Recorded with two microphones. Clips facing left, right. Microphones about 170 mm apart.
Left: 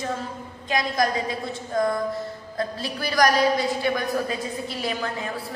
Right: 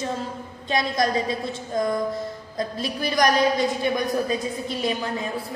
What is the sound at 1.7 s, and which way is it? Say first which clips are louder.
A woman's voice: even; 20° right (ahead or behind).